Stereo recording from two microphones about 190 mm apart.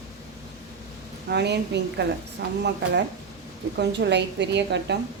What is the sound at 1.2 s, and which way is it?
A woman's voice, 60° right (ahead or behind).